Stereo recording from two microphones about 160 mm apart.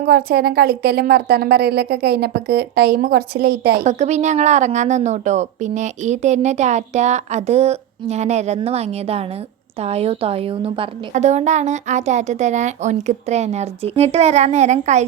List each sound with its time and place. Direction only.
0.0 s a woman's voice: 65° right (ahead or behind)
3.8 s a woman's voice: 45° right (ahead or behind)